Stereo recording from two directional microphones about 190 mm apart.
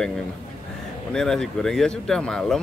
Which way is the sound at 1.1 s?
5° left (ahead or behind).